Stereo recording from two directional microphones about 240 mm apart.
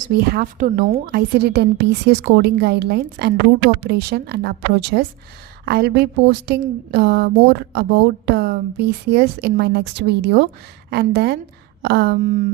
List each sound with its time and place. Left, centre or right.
0.0 s a woman's voice: right